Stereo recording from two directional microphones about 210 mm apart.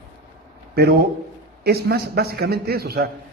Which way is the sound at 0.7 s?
50° right (ahead or behind).